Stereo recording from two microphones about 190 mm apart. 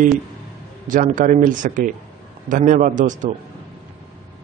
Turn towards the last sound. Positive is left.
turn(degrees=-40)  # may be behind; listen again after turning